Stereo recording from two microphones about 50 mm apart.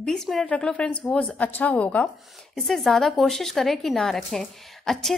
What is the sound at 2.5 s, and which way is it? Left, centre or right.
A woman's voice, centre.